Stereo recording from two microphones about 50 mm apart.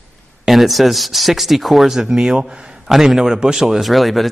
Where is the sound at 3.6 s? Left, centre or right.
Centre.